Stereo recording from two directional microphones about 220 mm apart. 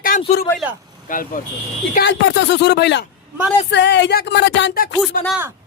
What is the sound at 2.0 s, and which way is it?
A man's voice, 50° left (ahead or behind).